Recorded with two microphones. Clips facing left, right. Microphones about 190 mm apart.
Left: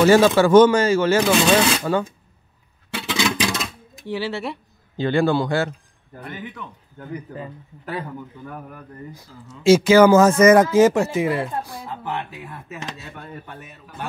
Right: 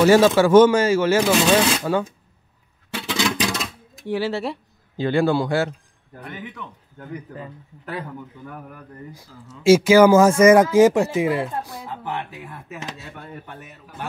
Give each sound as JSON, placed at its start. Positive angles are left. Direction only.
{"t": 0.0, "sound": "speech", "side_deg": -5}
{"t": 3.0, "sound": "a sound", "side_deg": 5}
{"t": 4.0, "sound": "speech", "side_deg": -50}
{"t": 4.9, "sound": "speech", "side_deg": -5}
{"t": 6.2, "sound": "speech", "side_deg": 5}
{"t": 7.8, "sound": "speech", "side_deg": 5}
{"t": 9.1, "sound": "speech", "side_deg": -10}